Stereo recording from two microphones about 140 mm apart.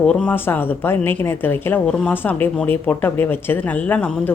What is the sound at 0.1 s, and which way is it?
A woman's voice, 10° left (ahead or behind).